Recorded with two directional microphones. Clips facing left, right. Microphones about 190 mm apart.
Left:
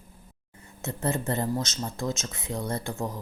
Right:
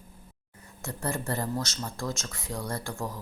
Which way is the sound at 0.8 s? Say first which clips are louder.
Left 4 dB; 20° left (ahead or behind).